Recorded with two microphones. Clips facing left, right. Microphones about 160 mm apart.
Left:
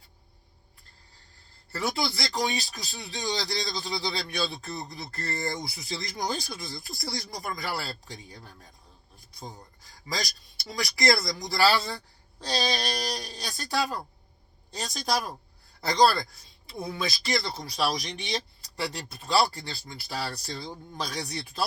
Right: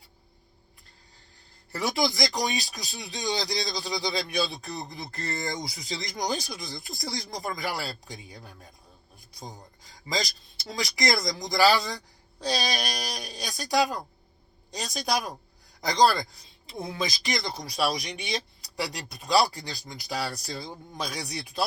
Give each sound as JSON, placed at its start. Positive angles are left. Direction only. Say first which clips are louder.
{"t": 1.7, "sound": "speech", "louder": "right 3 dB", "side_deg": -20}